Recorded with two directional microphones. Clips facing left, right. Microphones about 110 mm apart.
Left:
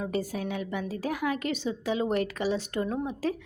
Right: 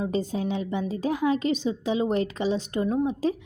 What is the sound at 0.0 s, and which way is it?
A woman's voice, 25° right (ahead or behind).